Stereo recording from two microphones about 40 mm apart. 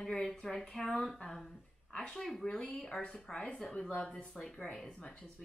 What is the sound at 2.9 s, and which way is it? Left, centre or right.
Speech, centre.